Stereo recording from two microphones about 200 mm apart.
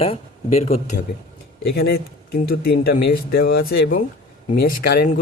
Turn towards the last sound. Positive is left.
turn(degrees=50)  # may be behind; listen again after turning